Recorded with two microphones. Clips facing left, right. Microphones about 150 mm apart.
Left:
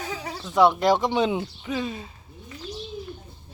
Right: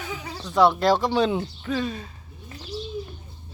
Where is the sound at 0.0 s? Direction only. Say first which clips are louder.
Left 2 dB; 35° left (ahead or behind).